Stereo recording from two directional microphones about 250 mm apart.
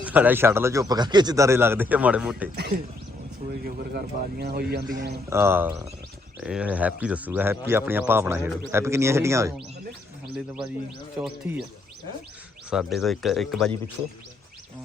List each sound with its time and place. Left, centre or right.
0.0 s speech: centre
2.6 s a man's voice: right
5.3 s speech: centre
11.2 s speech: centre
12.7 s speech: centre